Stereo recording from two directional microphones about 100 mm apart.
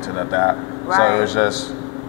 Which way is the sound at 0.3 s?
20° left (ahead or behind).